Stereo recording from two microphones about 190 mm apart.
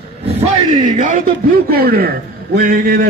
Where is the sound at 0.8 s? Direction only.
45° right (ahead or behind).